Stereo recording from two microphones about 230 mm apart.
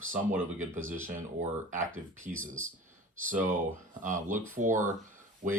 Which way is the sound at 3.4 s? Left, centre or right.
Right.